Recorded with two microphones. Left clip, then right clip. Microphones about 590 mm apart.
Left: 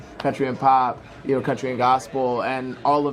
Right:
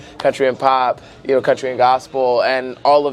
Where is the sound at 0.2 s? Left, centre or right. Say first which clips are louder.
Right 7 dB; right.